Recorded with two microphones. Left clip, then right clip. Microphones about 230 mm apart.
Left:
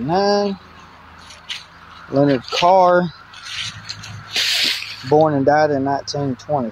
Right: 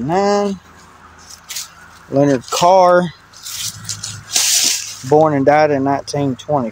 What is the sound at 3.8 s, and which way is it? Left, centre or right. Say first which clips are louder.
Drip: right 4 dB; centre.